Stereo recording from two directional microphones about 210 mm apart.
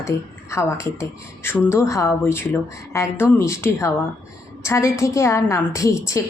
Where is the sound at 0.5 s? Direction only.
15° left (ahead or behind).